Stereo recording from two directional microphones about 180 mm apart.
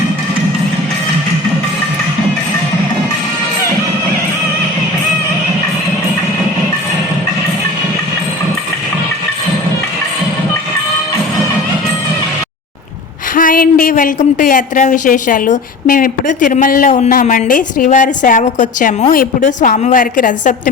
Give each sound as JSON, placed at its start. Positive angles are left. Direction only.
{"t": 13.3, "sound": "a woman's voice", "side_deg": 50}